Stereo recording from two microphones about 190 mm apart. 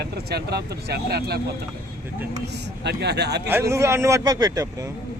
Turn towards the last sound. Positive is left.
turn(degrees=-20)  # may be behind; listen again after turning